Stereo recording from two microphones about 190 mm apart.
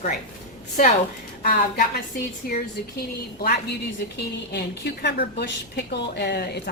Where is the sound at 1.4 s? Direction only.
50° left (ahead or behind).